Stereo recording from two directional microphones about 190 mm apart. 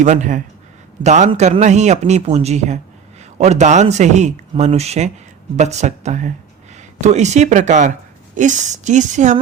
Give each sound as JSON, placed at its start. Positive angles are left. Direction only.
{"t": 0.0, "sound": "a man's voice", "side_deg": -40}